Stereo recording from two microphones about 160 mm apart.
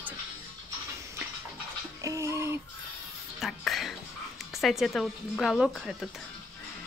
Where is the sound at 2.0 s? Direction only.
20° right (ahead or behind).